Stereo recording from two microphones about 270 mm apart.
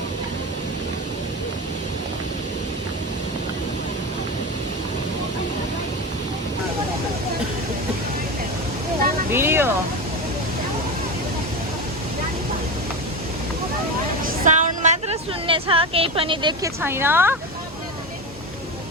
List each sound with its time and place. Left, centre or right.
9.3 s speech: centre
14.3 s a woman's voice: right; by 17.3 s centre